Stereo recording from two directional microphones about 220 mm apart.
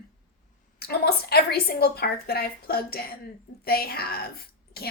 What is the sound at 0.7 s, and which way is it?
A woman's voice, 45° left (ahead or behind).